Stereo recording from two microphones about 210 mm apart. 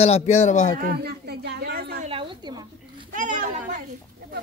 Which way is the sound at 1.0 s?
50° right (ahead or behind).